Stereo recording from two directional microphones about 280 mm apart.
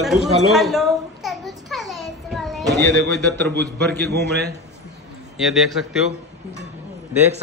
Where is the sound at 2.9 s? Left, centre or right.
Right.